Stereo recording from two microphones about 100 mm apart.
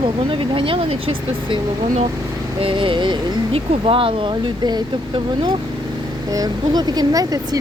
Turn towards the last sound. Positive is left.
turn(degrees=-35)  # may be behind; listen again after turning